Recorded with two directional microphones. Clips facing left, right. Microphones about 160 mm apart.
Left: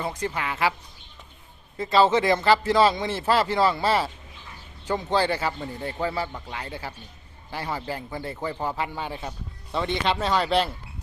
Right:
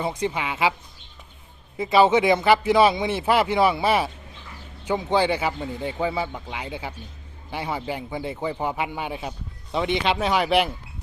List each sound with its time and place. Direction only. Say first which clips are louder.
0.0 s speech: right 3 dB; 10° right (ahead or behind)
1.7 s speech: right 2 dB; 15° right (ahead or behind)